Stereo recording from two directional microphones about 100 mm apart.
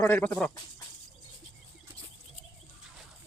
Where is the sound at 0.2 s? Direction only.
10° left (ahead or behind).